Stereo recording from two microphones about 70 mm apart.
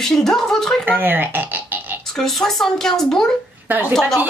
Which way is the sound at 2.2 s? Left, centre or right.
Centre.